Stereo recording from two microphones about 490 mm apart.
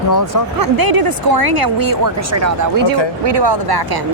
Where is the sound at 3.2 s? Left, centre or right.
Right.